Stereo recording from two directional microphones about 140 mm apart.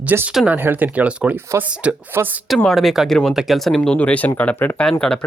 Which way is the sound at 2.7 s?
Centre (ahead or behind).